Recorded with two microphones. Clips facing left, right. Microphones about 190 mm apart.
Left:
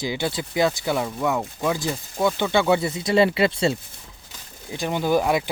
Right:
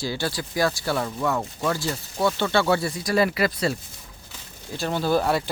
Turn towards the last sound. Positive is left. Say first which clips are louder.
# left 1 dB
turn(degrees=15)  # may be behind; listen again after turning